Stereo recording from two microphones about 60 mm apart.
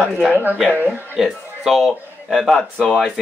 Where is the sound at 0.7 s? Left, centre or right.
Right.